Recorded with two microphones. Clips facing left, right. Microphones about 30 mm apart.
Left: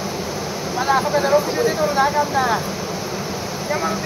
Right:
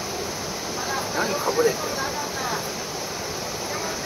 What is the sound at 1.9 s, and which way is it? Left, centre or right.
Speech, left.